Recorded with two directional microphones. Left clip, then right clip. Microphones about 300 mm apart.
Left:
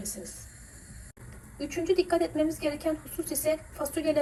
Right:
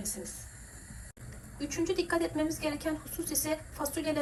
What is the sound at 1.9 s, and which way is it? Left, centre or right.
A woman's voice, centre.